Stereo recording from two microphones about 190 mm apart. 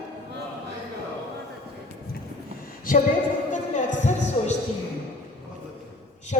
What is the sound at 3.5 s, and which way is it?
Music, 40° left (ahead or behind).